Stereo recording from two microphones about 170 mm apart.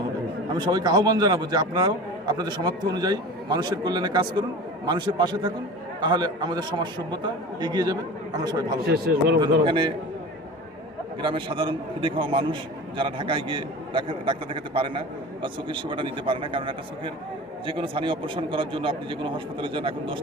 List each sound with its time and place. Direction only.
0.5 s a man's voice: 25° right (ahead or behind)
8.8 s a man's voice: 65° right (ahead or behind)
9.6 s a man's voice: 30° right (ahead or behind)
11.2 s a man's voice: 30° right (ahead or behind)